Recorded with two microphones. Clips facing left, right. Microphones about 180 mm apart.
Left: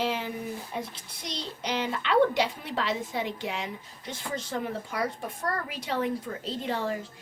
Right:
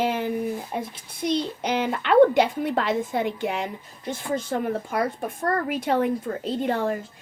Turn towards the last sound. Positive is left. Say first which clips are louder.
# right 6 dB
turn(degrees=-55)  # may be behind; listen again after turning